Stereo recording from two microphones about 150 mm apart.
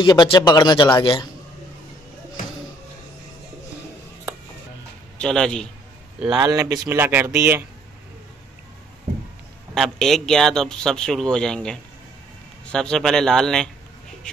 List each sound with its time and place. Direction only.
0.0 s speech: 30° left (ahead or behind)
5.2 s speech: 5° left (ahead or behind)
6.4 s speech: 20° right (ahead or behind)
9.8 s speech: centre (ahead or behind)